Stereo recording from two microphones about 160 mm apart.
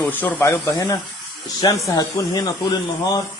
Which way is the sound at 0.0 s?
10° left (ahead or behind).